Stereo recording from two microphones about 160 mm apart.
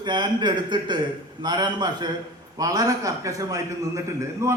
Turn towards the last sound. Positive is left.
turn(degrees=-15)  # may be behind; listen again after turning